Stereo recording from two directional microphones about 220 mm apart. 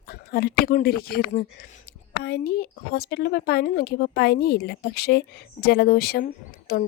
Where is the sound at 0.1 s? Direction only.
45° left (ahead or behind).